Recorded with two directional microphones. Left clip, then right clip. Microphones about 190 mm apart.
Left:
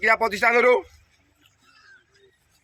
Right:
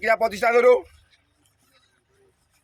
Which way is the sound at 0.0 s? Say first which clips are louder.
Left 1 dB; 90° right.